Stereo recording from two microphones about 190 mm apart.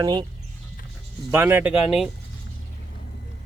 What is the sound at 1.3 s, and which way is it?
Speech, 10° right (ahead or behind).